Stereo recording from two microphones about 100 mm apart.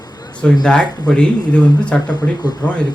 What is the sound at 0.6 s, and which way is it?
Speech, 10° left (ahead or behind).